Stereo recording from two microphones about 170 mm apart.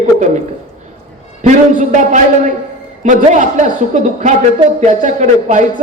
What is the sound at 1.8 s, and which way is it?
A man's voice, 45° right (ahead or behind).